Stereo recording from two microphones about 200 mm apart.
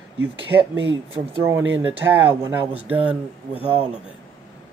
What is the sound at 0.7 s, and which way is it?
Speech, 80° right.